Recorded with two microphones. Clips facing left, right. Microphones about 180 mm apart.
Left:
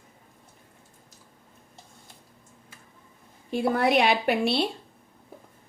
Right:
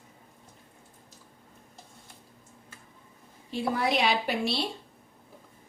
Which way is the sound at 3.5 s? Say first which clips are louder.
Left 5 dB; 55° left (ahead or behind).